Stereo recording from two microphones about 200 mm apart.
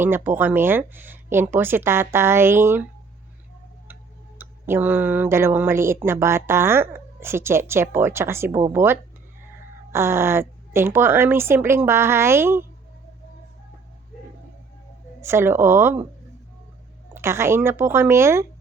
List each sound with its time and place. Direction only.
0.0 s speech: 10° right (ahead or behind)
4.4 s speech: 10° right (ahead or behind)
15.2 s speech: 15° right (ahead or behind)
17.2 s speech: 15° right (ahead or behind)